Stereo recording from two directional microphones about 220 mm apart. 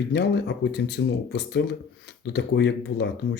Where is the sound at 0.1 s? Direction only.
50° left (ahead or behind).